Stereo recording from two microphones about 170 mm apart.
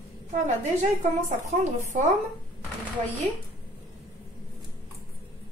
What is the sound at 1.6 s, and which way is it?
Speech, 45° right (ahead or behind).